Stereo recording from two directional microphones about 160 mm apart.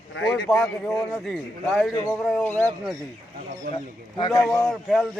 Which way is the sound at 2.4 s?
10° left (ahead or behind).